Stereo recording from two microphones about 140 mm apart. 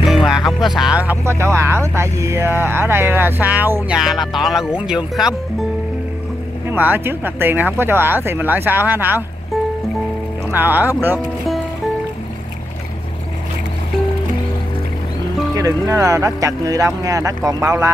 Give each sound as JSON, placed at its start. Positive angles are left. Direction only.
{"t": 0.0, "sound": "music", "side_deg": 0}
{"t": 0.5, "sound": "speech", "side_deg": 0}
{"t": 3.9, "sound": "speech", "side_deg": 0}
{"t": 6.7, "sound": "speech", "side_deg": -15}
{"t": 10.5, "sound": "speech", "side_deg": -15}
{"t": 15.5, "sound": "speech", "side_deg": -25}